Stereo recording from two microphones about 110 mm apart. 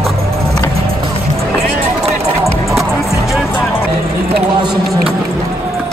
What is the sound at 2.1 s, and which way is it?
Music, 25° right (ahead or behind).